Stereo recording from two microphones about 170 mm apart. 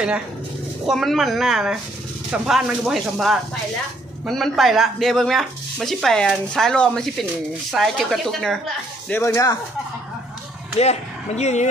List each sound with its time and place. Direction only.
0.8 s speech: centre (ahead or behind)
9.1 s speech: 20° left (ahead or behind)
10.8 s speech: 40° left (ahead or behind)